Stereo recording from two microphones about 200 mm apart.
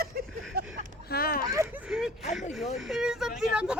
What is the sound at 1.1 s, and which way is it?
Speech, 50° left (ahead or behind).